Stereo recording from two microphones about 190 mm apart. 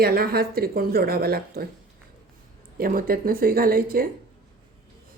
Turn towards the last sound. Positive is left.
turn(degrees=-50)  # may be behind; listen again after turning